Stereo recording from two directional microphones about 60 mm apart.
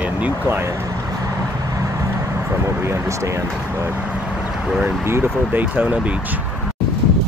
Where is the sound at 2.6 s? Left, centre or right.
Right.